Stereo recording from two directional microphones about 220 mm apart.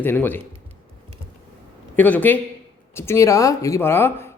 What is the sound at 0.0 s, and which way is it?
Speech, 10° left (ahead or behind).